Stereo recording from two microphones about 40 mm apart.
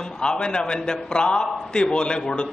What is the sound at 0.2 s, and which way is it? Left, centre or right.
A man's voice, left.